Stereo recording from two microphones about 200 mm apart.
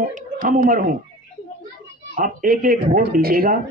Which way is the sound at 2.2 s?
45° right (ahead or behind).